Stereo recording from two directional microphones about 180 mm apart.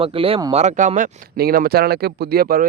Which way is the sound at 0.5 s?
40° right (ahead or behind).